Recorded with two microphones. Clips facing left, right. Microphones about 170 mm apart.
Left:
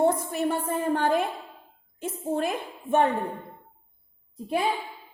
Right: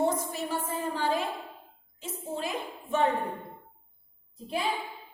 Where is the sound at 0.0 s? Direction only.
55° left (ahead or behind).